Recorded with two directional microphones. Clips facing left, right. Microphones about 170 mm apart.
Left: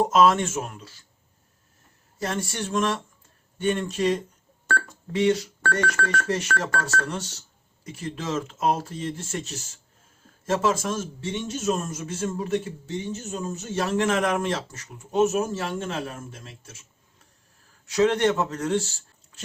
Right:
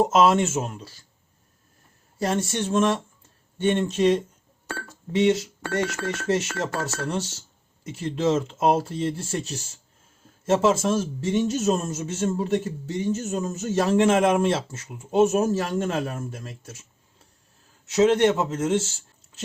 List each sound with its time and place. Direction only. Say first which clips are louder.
0.0 s speech: right 1 dB; 25° right (ahead or behind)
2.1 s speech: right 4 dB; 25° right (ahead or behind)
4.6 s cash register: left 6 dB; 5° right (ahead or behind)
5.1 s speech: right 1 dB; 20° right (ahead or behind)
7.1 s speech: right 4 dB; 30° right (ahead or behind)
11.8 s speech: right 3 dB; 25° right (ahead or behind)
12.4 s speech: right 2 dB; 40° right (ahead or behind)
17.9 s speech: right 2 dB; 20° right (ahead or behind)